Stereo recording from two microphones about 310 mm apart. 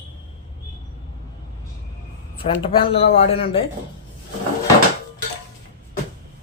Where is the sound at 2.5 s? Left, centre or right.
Centre.